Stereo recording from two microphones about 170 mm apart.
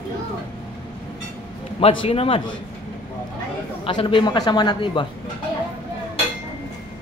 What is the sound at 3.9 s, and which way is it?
A man's voice, 30° left (ahead or behind).